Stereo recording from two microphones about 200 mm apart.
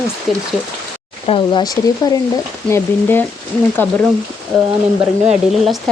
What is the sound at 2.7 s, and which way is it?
Speech, 10° left (ahead or behind).